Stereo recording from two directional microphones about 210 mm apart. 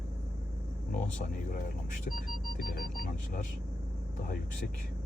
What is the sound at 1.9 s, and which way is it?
Speech, 45° left (ahead or behind).